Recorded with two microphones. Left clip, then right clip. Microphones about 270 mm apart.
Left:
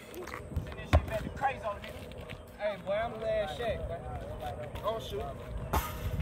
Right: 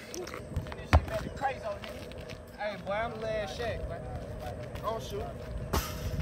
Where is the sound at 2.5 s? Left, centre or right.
Centre.